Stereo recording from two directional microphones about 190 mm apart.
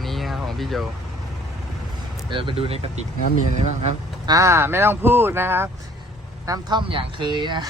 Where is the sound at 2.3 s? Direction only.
25° right (ahead or behind).